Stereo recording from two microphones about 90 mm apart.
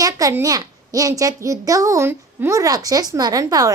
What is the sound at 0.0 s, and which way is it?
A woman's voice, 40° right (ahead or behind).